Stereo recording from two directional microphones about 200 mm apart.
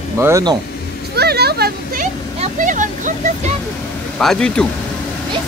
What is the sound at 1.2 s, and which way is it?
Speech, 55° right (ahead or behind).